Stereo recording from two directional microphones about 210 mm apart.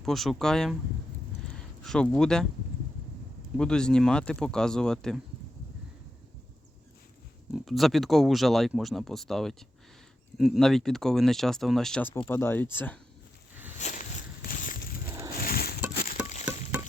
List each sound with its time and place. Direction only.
0.0 s speech: centre (ahead or behind)
3.6 s speech: 5° left (ahead or behind)
7.5 s speech: centre (ahead or behind)
13.7 s walk: 35° left (ahead or behind)
15.4 s a sound: 45° left (ahead or behind)